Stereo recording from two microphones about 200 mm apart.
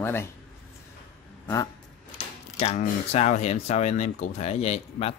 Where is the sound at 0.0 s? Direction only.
10° left (ahead or behind).